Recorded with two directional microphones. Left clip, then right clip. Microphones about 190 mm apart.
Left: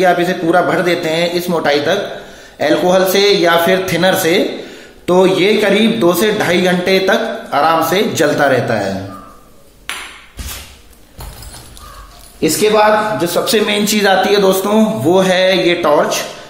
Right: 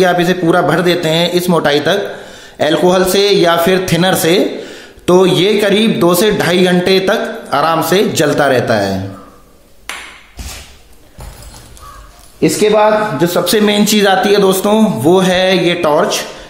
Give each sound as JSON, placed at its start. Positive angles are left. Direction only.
{"t": 0.0, "sound": "a man's voice", "side_deg": -45}
{"t": 12.4, "sound": "a man's voice", "side_deg": -50}